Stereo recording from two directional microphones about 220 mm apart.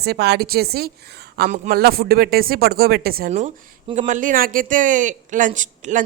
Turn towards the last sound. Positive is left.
turn(degrees=-35)  # may be behind; listen again after turning